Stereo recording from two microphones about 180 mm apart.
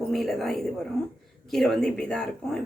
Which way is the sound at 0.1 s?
Centre (ahead or behind).